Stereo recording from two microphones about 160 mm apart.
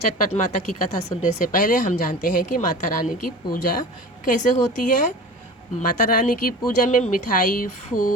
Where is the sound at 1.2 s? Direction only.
55° left (ahead or behind).